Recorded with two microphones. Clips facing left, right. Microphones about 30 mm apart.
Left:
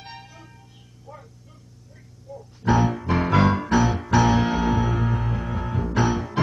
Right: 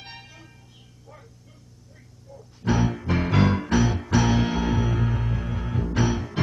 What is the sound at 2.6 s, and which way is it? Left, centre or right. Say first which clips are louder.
Music: left 3 dB; centre.